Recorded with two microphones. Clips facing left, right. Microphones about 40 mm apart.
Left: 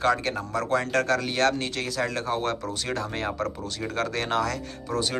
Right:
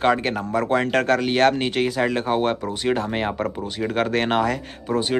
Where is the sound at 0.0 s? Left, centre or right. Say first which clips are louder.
Right 4 dB; right.